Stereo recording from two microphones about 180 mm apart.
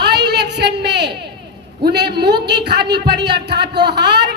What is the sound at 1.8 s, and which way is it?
A woman's voice, 65° right (ahead or behind).